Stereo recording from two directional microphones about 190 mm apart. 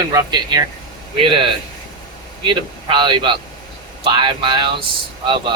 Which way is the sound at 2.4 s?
25° right (ahead or behind).